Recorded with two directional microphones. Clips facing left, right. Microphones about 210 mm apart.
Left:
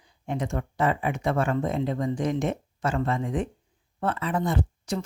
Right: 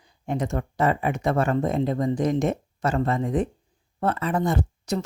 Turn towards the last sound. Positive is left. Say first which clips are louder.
# right 2 dB
turn(degrees=-40)  # may be behind; listen again after turning